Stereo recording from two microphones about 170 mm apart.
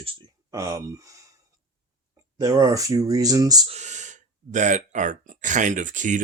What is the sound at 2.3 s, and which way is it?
Speech, 20° right (ahead or behind).